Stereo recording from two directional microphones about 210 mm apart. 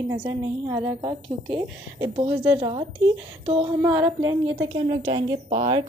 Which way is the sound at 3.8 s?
15° right (ahead or behind).